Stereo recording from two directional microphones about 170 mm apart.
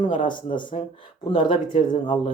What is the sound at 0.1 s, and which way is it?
Speech, 50° left (ahead or behind).